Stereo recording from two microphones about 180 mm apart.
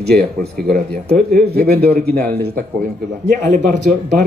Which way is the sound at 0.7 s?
55° right (ahead or behind).